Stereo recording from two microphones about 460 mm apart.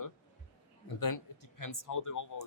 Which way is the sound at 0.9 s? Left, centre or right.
Left.